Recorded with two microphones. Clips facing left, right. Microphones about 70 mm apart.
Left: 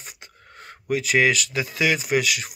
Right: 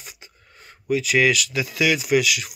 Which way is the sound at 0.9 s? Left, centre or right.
Left.